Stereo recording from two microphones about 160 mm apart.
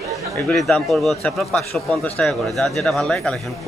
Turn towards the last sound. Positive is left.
turn(degrees=5)  # may be behind; listen again after turning